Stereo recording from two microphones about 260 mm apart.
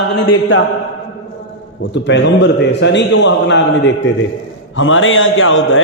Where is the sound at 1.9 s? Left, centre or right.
Left.